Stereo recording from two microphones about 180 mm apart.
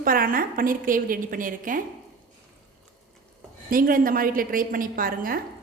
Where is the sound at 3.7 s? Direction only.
50° right (ahead or behind).